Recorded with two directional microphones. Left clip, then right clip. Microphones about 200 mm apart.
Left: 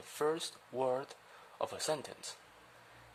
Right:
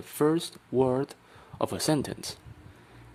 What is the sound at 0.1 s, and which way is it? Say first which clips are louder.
Speech: right 9 dB; 20° right (ahead or behind).